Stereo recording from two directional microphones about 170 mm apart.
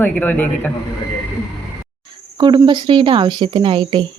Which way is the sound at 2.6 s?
25° right (ahead or behind).